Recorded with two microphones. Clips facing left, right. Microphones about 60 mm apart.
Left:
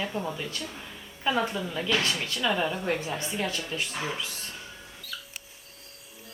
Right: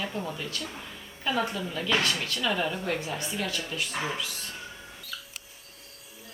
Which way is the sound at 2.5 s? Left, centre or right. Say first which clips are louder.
Left 1 dB; centre.